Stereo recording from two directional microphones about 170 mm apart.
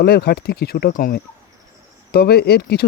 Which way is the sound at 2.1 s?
70° left (ahead or behind).